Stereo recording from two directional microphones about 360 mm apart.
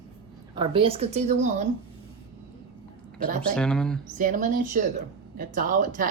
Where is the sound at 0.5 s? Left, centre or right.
Centre.